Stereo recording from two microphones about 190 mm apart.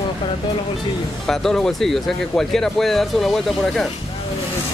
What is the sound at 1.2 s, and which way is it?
Speech, centre (ahead or behind).